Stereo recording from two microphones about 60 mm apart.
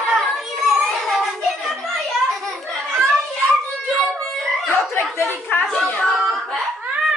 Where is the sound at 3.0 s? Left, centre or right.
Centre.